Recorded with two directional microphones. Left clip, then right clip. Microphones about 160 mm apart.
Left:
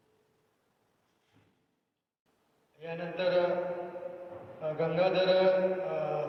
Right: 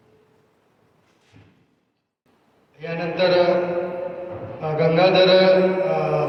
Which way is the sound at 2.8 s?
45° right (ahead or behind).